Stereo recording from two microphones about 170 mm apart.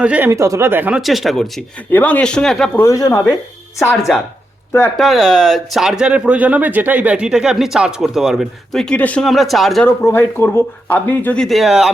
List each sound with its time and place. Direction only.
0.0 s speech: 10° right (ahead or behind)
2.8 s speech: 20° left (ahead or behind)
4.9 s speech: centre (ahead or behind)
10.1 s speech: 10° left (ahead or behind)